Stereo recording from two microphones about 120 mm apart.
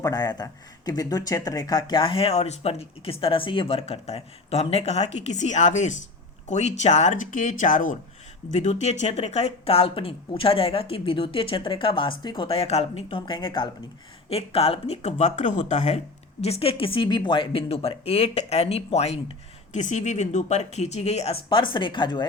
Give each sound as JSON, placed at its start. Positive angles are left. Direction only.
{"t": 0.0, "sound": "speech", "side_deg": 35}
{"t": 6.5, "sound": "speech", "side_deg": 75}
{"t": 8.5, "sound": "speech", "side_deg": 70}
{"t": 14.3, "sound": "speech", "side_deg": 55}
{"t": 16.4, "sound": "speech", "side_deg": 55}
{"t": 19.7, "sound": "speech", "side_deg": 80}
{"t": 21.5, "sound": "speech", "side_deg": 45}